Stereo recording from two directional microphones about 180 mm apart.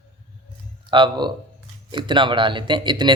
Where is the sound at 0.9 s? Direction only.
25° right (ahead or behind).